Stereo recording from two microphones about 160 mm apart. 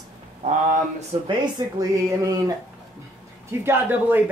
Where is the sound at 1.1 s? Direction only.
35° right (ahead or behind).